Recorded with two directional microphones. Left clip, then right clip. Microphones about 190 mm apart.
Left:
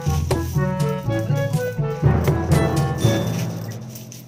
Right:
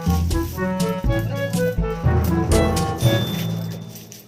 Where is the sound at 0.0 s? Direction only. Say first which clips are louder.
Even; centre (ahead or behind).